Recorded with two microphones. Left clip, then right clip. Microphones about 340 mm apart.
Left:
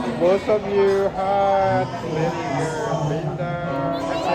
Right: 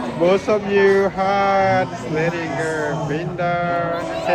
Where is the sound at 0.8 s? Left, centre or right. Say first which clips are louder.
Right 6 dB; right.